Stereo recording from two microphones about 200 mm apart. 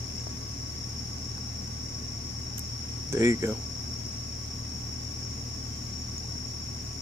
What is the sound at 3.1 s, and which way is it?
Speech, 15° right (ahead or behind).